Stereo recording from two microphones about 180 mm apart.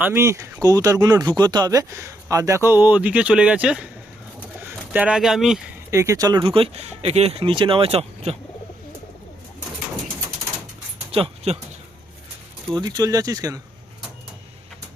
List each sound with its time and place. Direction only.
0.0 s speech: 15° right (ahead or behind)
4.4 s pigeon: 10° right (ahead or behind)
5.9 s speech: 15° right (ahead or behind); by 8.4 s 35° right (ahead or behind)
11.1 s speech: 30° right (ahead or behind)
12.7 s speech: 20° right (ahead or behind)